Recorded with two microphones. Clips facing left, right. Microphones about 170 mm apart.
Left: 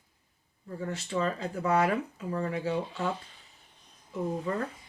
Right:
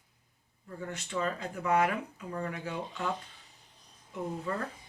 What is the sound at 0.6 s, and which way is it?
Speech, 35° left (ahead or behind).